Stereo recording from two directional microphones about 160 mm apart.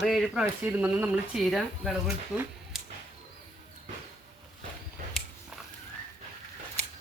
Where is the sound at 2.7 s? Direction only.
Centre (ahead or behind).